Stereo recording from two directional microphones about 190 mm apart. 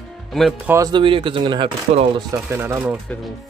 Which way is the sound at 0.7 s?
20° right (ahead or behind).